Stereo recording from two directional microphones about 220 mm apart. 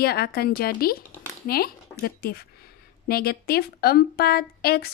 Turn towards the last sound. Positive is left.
turn(degrees=45)  # may be behind; listen again after turning